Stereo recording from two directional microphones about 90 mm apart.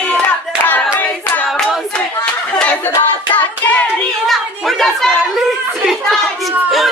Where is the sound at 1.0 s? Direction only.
10° left (ahead or behind).